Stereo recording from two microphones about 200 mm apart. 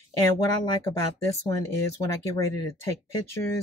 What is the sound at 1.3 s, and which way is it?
Speech, 15° left (ahead or behind).